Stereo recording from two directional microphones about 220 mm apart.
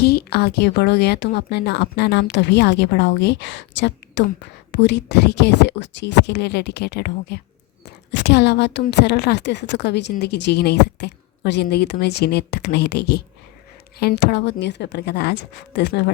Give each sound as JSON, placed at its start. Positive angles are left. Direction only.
{"t": 0.0, "sound": "a woman's voice", "side_deg": 45}